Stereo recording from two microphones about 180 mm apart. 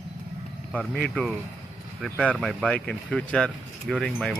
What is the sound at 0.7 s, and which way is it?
Speech, 5° left (ahead or behind).